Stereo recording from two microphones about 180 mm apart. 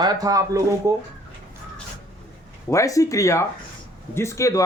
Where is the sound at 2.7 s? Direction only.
15° left (ahead or behind).